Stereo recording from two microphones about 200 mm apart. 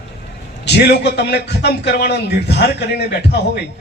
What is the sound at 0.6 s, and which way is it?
A man's voice, 60° left (ahead or behind).